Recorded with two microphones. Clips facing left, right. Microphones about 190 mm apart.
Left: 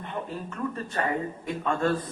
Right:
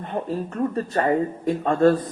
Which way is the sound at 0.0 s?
40° right (ahead or behind).